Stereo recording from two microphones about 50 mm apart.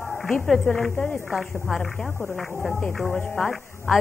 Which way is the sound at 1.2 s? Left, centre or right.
Centre.